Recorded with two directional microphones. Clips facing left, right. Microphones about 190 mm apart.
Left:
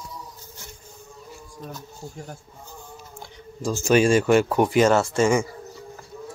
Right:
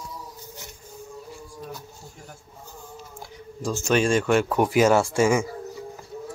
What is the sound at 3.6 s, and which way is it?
Speech, centre (ahead or behind).